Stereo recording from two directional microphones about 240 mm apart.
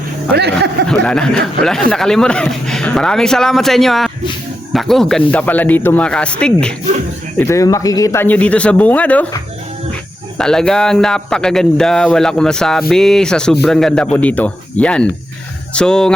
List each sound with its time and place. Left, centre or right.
0.3 s speech: right
0.9 s speech: centre
10.3 s speech: centre